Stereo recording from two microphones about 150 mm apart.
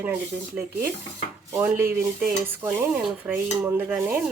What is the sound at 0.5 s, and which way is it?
Stir, 15° right (ahead or behind).